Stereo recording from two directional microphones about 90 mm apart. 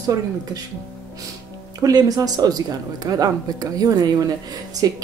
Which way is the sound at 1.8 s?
45° right (ahead or behind).